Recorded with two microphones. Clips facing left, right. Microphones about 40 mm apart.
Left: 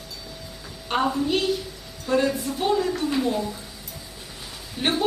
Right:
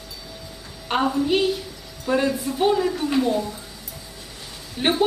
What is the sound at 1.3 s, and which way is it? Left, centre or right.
Speech, centre.